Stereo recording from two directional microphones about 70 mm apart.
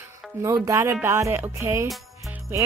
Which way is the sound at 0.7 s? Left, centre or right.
Right.